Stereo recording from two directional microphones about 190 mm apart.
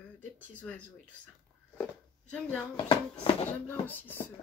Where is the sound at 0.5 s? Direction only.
5° left (ahead or behind).